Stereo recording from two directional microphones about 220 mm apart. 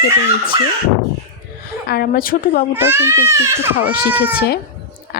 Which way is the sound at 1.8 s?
45° left (ahead or behind).